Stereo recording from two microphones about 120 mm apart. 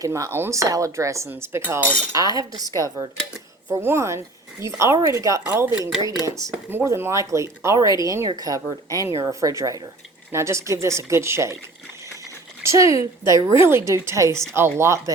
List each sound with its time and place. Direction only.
0.0 s speech: 25° right (ahead or behind)
2.1 s cutlery: 30° right (ahead or behind)
3.7 s speech: 20° right (ahead or behind)
12.6 s speech: 25° right (ahead or behind)